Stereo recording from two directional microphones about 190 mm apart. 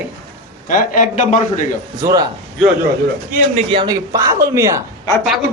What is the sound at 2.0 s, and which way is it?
Speech, 15° right (ahead or behind).